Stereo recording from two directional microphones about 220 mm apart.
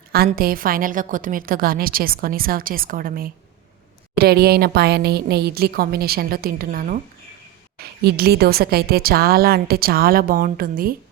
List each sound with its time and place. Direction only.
0.1 s a woman's voice: 45° right (ahead or behind)